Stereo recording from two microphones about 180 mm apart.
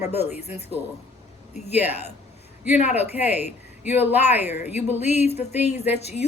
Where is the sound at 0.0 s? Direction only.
35° left (ahead or behind).